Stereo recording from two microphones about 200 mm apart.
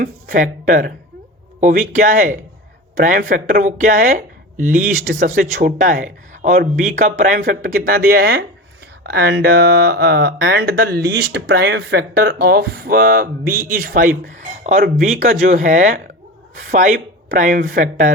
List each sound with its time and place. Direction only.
0.0 s speech: 40° right (ahead or behind)